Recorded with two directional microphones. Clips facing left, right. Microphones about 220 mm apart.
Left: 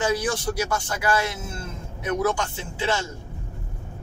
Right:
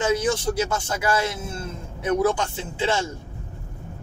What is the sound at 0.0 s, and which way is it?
Speech, 25° right (ahead or behind).